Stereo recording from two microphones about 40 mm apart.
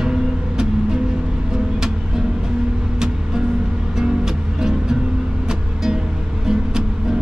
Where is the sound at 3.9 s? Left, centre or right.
Centre.